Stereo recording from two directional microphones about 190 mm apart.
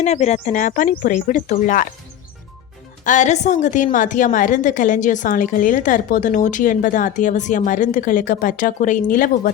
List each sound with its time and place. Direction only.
0.0 s speech: 35° left (ahead or behind)
3.0 s a woman's voice: 40° left (ahead or behind)